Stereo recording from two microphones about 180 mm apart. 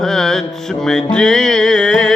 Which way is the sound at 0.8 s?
5° left (ahead or behind).